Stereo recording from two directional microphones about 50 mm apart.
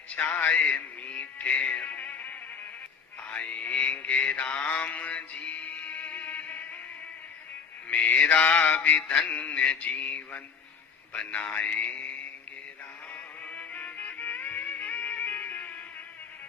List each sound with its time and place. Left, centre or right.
0.1 s music: left
3.2 s mantra: left
4.3 s music: left
7.9 s music: left
8.4 s mantra: left
9.0 s mantra: centre
13.4 s music: left